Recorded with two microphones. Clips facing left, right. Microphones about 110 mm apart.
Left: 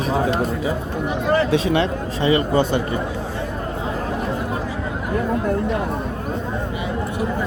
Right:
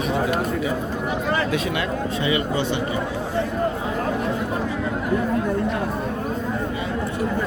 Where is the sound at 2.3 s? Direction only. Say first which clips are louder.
Left 7 dB; 40° left (ahead or behind).